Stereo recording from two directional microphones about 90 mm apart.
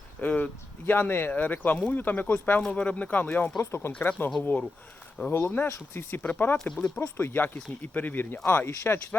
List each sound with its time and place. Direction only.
0.2 s speech: 15° left (ahead or behind)
6.7 s speech: 10° left (ahead or behind)
7.2 s speech: 25° left (ahead or behind)